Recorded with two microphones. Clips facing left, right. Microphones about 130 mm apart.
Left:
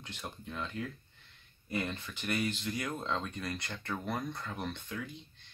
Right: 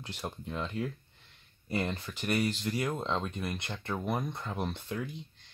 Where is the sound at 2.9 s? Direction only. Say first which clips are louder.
Right 3 dB; 20° right (ahead or behind).